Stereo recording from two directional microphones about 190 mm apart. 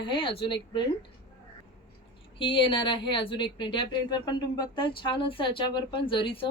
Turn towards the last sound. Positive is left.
turn(degrees=25)  # may be behind; listen again after turning